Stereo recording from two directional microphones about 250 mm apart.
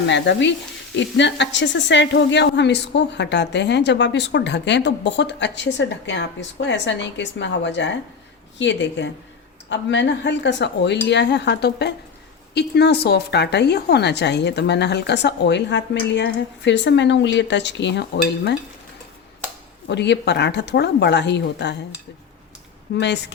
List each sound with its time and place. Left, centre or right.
0.1 s a woman's voice: left
19.9 s a woman's voice: left